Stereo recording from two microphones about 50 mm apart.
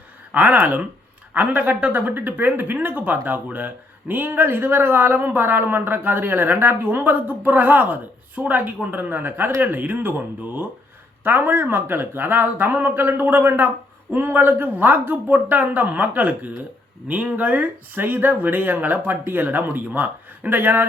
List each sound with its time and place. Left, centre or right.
0.3 s speech: right